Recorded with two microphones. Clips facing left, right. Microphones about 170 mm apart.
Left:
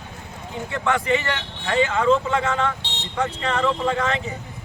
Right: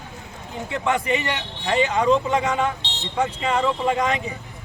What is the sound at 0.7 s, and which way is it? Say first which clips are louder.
A man's voice: left 1 dB; 15° right (ahead or behind).